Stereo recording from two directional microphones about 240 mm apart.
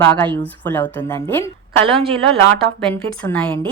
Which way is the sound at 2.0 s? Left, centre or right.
Right.